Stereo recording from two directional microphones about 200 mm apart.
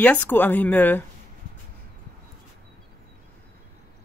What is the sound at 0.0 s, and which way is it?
Speech, 10° left (ahead or behind).